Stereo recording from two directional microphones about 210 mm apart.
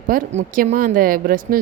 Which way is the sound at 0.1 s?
40° right (ahead or behind).